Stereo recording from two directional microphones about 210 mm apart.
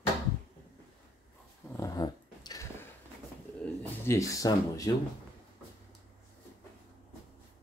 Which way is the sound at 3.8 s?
15° left (ahead or behind).